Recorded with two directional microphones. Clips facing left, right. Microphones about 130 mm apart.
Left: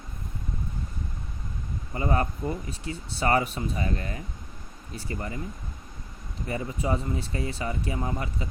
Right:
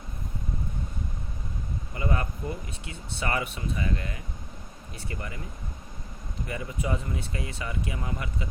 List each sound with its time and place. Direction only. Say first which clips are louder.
2.0 s speech: left 4 dB; 35° left (ahead or behind)
6.5 s speech: left 3 dB; 30° left (ahead or behind)